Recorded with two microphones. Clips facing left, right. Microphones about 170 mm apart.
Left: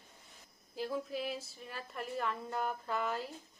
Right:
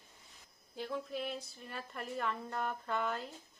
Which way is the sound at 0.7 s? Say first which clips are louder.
Left 2 dB; centre (ahead or behind).